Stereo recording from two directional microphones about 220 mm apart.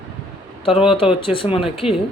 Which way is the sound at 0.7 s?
Centre (ahead or behind).